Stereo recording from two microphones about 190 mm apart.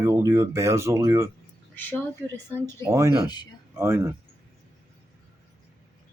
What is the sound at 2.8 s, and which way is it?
Speech, 15° right (ahead or behind).